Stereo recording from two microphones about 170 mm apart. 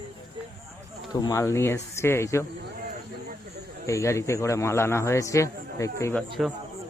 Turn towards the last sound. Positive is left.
turn(degrees=0)  # may be behind; listen again after turning